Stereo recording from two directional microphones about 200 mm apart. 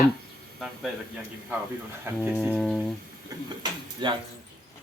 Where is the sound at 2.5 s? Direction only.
Centre (ahead or behind).